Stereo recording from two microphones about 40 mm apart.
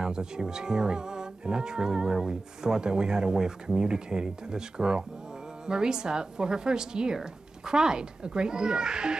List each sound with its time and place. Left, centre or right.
0.0 s a woman's voice: centre